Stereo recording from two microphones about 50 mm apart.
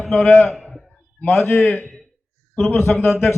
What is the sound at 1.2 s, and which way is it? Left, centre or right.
Speech, left.